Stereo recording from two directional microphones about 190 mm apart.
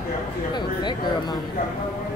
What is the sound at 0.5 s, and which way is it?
Speech, 25° left (ahead or behind).